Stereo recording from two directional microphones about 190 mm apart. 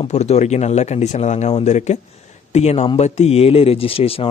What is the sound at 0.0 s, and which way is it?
Speech, 35° left (ahead or behind).